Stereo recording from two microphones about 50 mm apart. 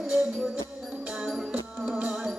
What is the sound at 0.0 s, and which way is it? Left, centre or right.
Music, centre.